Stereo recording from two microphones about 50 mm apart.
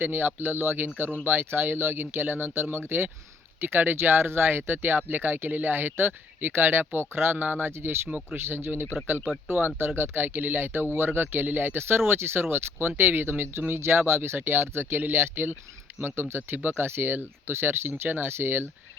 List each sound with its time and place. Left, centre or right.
0.0 s speech: right